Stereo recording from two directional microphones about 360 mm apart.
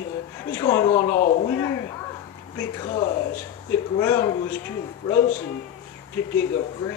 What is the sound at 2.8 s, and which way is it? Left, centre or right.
Speech, centre.